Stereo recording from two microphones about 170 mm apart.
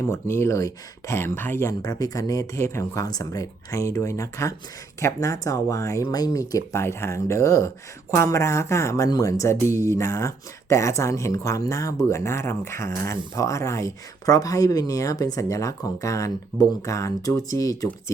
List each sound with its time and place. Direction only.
0.0 s speech: 15° left (ahead or behind)